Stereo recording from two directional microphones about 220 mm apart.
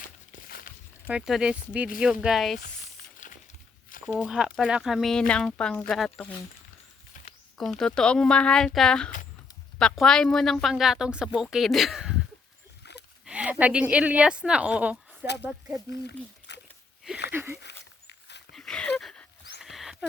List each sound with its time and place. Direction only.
0.4 s walk: 45° left (ahead or behind)
1.0 s a woman's voice: centre (ahead or behind)
2.6 s a sound: 40° left (ahead or behind)
4.0 s a woman's voice: centre (ahead or behind)
7.6 s a woman's voice: centre (ahead or behind)
13.2 s a woman's voice: 5° right (ahead or behind)
15.9 s speech: 50° left (ahead or behind)
17.2 s a sound: 10° right (ahead or behind)
18.5 s a sound: 5° left (ahead or behind)